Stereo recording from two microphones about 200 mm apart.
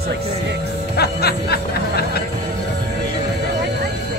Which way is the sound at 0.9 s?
55° left (ahead or behind).